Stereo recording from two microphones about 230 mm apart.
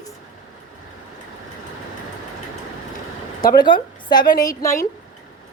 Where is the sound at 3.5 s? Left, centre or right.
Centre.